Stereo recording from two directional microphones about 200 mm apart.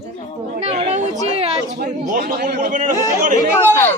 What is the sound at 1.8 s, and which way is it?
A man's voice, 45° right (ahead or behind).